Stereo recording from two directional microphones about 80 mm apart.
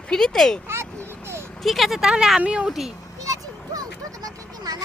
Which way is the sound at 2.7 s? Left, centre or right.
Centre.